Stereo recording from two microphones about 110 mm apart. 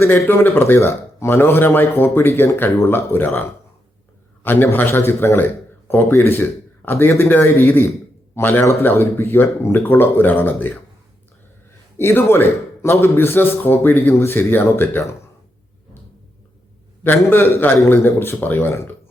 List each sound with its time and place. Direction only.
0.0 s a man's voice: 20° left (ahead or behind)
4.4 s a man's voice: 20° left (ahead or behind)
11.9 s a man's voice: 20° left (ahead or behind)
17.0 s a man's voice: 20° left (ahead or behind)